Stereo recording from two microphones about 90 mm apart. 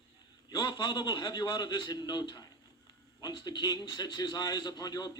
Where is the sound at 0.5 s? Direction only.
55° left (ahead or behind).